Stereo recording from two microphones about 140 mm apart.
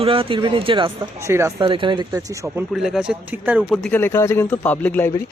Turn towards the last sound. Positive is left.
turn(degrees=15)  # may be behind; listen again after turning